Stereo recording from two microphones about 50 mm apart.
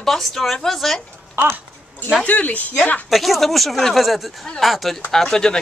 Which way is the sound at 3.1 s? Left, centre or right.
Centre.